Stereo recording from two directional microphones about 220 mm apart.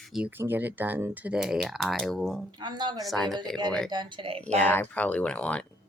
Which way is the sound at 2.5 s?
20° right (ahead or behind).